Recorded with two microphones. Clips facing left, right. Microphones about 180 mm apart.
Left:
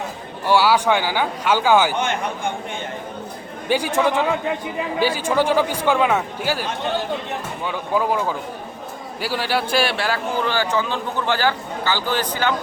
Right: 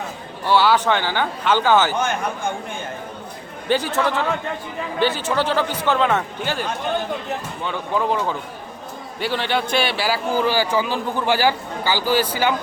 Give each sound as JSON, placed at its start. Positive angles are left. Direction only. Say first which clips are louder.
{"t": 0.4, "sound": "speech", "louder": "even", "side_deg": 10}
{"t": 3.7, "sound": "a man's voice", "louder": "left 1 dB", "side_deg": 10}